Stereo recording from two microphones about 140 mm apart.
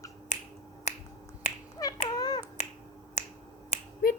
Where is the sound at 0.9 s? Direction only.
55° left (ahead or behind).